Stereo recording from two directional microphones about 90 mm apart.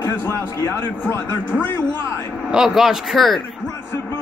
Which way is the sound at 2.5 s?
5° right (ahead or behind).